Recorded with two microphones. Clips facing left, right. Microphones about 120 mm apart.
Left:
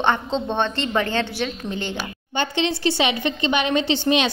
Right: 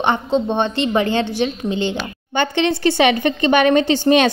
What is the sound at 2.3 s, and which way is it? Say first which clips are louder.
A woman's voice: right 5 dB; 55° right (ahead or behind).